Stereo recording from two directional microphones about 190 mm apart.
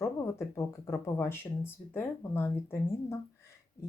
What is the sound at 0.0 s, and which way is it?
Speech, 15° left (ahead or behind).